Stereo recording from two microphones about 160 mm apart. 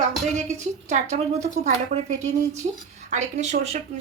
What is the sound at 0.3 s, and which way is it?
A woman's voice, 45° right (ahead or behind).